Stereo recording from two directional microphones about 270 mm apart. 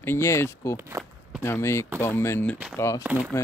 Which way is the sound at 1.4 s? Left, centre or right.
Centre.